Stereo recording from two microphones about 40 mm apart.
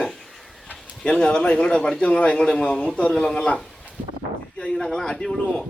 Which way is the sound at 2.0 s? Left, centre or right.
Left.